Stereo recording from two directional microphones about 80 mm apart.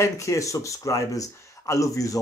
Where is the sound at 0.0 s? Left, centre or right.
Left.